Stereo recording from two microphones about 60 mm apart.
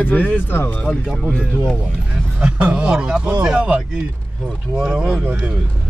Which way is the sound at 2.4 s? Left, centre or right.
Centre.